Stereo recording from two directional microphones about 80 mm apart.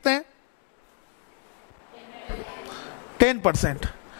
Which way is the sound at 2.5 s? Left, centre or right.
Left.